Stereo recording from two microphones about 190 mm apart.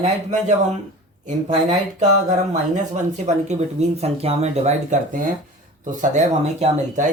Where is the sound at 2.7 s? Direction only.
40° right (ahead or behind).